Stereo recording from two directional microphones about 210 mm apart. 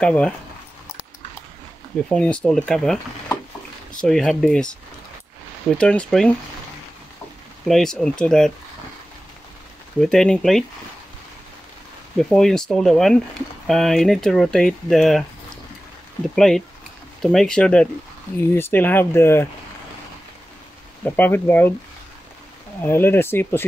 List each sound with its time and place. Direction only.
0.0 s speech: 5° left (ahead or behind)
2.0 s speech: 5° left (ahead or behind)
7.6 s speech: centre (ahead or behind)
9.9 s speech: 5° left (ahead or behind)
12.2 s speech: centre (ahead or behind)
21.0 s speech: 10° left (ahead or behind)
22.8 s speech: 10° left (ahead or behind)